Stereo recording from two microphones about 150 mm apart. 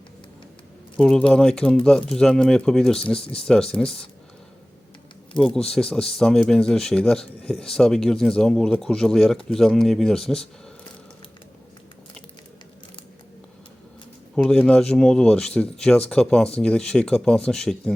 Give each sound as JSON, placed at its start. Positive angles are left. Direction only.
{"t": 0.9, "sound": "speech", "side_deg": 5}
{"t": 3.2, "sound": "speech", "side_deg": 40}
{"t": 3.4, "sound": "speech", "side_deg": 5}
{"t": 5.6, "sound": "speech", "side_deg": 5}
{"t": 14.3, "sound": "speech", "side_deg": 5}